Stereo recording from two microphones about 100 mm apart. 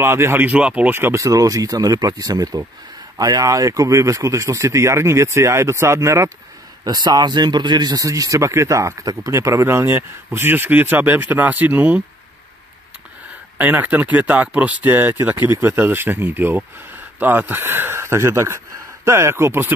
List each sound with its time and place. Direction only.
0.0 s speech: 25° right (ahead or behind)
0.9 s speech: 25° right (ahead or behind)
6.8 s speech: 40° right (ahead or behind); by 12.0 s 15° right (ahead or behind)
13.6 s speech: 20° right (ahead or behind)